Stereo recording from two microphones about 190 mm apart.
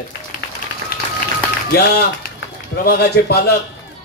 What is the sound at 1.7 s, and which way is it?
A man's voice, 55° left (ahead or behind).